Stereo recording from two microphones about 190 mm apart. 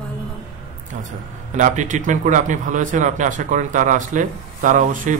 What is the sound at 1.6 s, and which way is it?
A man's voice, 40° right (ahead or behind).